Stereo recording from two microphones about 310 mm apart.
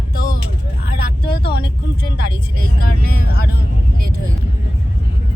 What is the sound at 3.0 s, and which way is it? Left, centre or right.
Speech, right.